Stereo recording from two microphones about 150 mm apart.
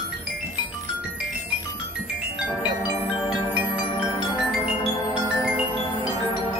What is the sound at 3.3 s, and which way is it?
Music, 5° right (ahead or behind).